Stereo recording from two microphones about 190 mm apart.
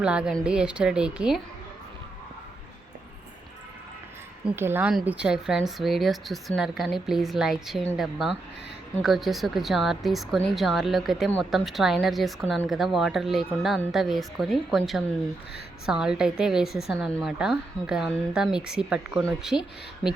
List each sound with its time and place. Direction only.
0.0 s speech: 5° right (ahead or behind)
4.4 s speech: 10° right (ahead or behind)